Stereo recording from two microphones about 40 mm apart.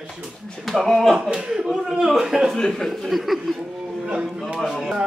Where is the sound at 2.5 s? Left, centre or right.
Centre.